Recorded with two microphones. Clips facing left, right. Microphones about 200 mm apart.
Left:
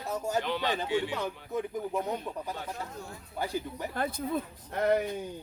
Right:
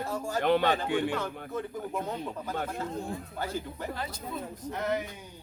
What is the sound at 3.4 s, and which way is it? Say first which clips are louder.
Speech: left 3 dB; 15° left (ahead or behind).